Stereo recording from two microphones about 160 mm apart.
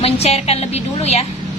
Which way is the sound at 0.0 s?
40° left (ahead or behind).